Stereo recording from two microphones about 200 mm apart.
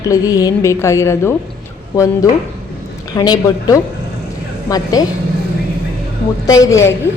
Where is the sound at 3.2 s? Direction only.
20° left (ahead or behind).